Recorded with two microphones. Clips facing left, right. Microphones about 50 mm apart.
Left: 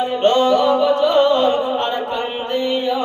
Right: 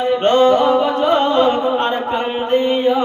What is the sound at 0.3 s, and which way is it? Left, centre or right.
Music, right.